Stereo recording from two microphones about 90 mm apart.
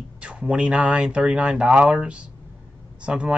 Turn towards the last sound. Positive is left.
turn(degrees=-10)  # may be behind; listen again after turning